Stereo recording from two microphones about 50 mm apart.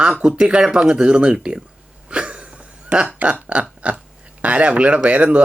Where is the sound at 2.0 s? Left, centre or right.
Right.